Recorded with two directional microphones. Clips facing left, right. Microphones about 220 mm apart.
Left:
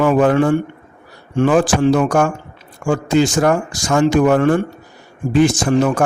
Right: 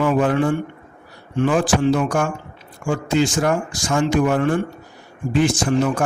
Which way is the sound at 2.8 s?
45° left (ahead or behind).